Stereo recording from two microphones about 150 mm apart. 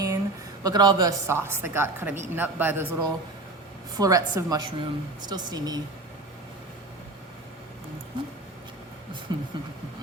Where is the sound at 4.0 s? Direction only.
25° right (ahead or behind).